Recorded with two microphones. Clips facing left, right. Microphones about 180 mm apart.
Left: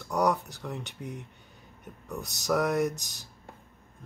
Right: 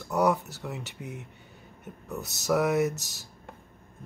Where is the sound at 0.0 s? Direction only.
5° right (ahead or behind).